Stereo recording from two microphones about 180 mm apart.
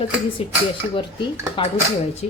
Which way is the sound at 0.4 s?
30° left (ahead or behind).